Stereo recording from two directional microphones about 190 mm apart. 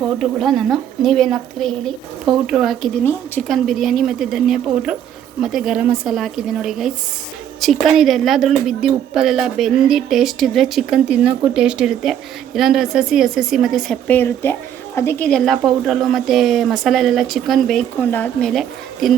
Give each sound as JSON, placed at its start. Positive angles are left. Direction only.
{"t": 0.2, "sound": "a woman's voice", "side_deg": 0}
{"t": 3.0, "sound": "a woman's voice", "side_deg": 10}
{"t": 3.5, "sound": "a woman's voice", "side_deg": 0}